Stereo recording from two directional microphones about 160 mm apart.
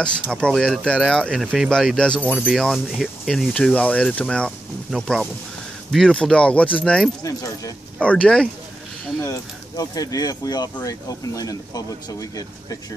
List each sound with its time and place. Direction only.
0.0 s speech: 5° left (ahead or behind)
9.2 s speech: 20° left (ahead or behind)